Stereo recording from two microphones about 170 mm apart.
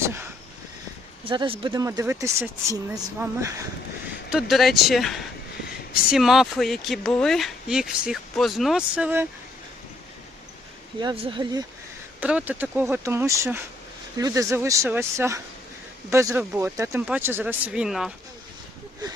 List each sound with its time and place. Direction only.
0.0 s a sound: 15° right (ahead or behind)
1.2 s speech: 30° right (ahead or behind)
1.7 s speech: 20° right (ahead or behind)
4.3 s speech: centre (ahead or behind)
11.0 s speech: 30° right (ahead or behind)
12.2 s speech: 10° right (ahead or behind)
19.0 s speech: 25° right (ahead or behind)